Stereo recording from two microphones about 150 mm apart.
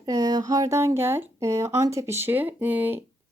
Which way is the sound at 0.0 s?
25° right (ahead or behind).